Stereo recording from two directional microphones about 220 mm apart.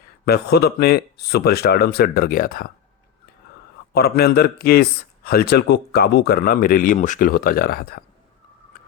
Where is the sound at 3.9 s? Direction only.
45° left (ahead or behind).